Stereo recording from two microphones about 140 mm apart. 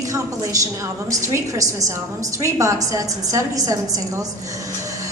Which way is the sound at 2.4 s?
20° right (ahead or behind).